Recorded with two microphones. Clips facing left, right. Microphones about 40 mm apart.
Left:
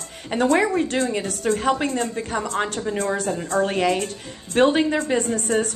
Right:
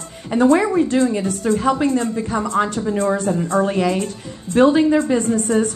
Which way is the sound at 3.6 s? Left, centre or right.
Left.